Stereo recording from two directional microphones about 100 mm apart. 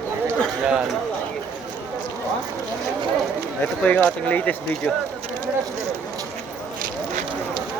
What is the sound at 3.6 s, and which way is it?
Speech, 15° left (ahead or behind).